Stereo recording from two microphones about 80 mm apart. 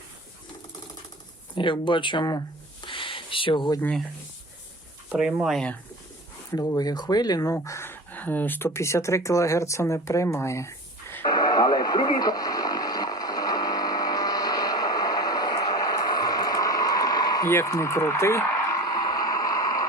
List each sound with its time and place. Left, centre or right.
1.5 s speech: left
2.8 s a sound: left
5.0 s speech: centre
6.7 s speech: left
7.5 s speech: left
8.1 s speech: left
11.3 s radio: left
17.4 s speech: left
18.9 s a sound: left